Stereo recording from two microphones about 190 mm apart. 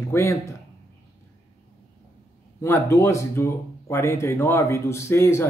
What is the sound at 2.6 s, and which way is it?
Speech, 15° left (ahead or behind).